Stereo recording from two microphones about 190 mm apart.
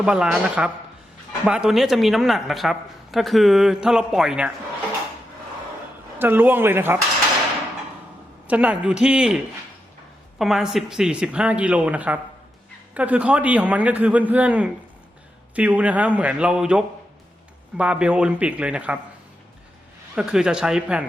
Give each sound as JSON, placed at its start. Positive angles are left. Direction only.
{"t": 0.0, "sound": "speech", "side_deg": -5}
{"t": 6.1, "sound": "a man's voice", "side_deg": -10}
{"t": 8.4, "sound": "a man's voice", "side_deg": -5}
{"t": 20.1, "sound": "speech", "side_deg": -5}